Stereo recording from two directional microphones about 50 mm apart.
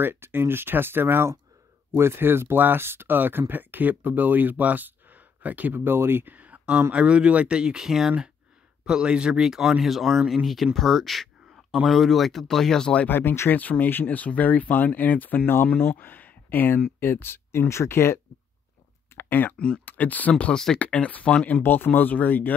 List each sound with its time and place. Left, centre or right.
0.0 s speech: right
5.9 s speech: right
6.3 s a sound: right
6.9 s a man's voice: right
9.5 s speech: centre
13.1 s speech: left
13.5 s speech: left
19.1 s a sound: left
19.8 s speech: left
20.5 s speech: centre
20.8 s speech: left
21.6 s speech: left